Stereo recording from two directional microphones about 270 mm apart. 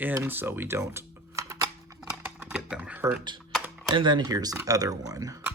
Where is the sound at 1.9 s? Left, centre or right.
Centre.